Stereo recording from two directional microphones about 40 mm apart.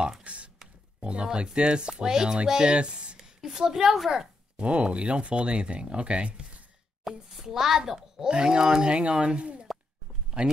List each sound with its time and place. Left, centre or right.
0.2 s a sound: right
1.0 s speech: right
3.3 s a woman's voice: centre
4.6 s speech: right
7.1 s a child's voice: centre
7.4 s a woman's voice: centre; by 9.7 s right